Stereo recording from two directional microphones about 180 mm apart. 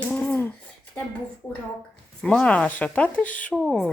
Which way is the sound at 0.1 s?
5° left (ahead or behind).